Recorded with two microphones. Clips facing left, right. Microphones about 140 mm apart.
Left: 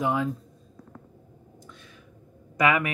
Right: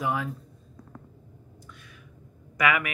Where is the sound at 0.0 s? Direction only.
25° left (ahead or behind).